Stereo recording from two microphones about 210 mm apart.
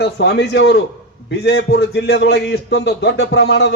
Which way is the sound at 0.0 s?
50° left (ahead or behind).